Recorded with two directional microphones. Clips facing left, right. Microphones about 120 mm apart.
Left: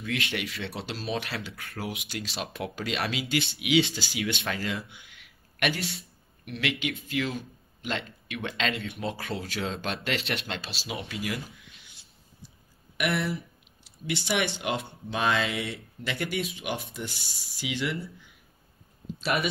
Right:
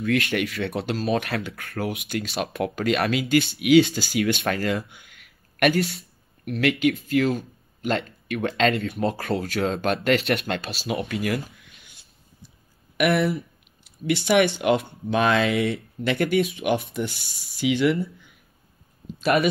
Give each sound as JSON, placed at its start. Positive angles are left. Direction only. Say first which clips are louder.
{"t": 0.0, "sound": "speech", "louder": "right 9 dB", "side_deg": -55}
{"t": 19.2, "sound": "speech", "louder": "right 8 dB", "side_deg": -50}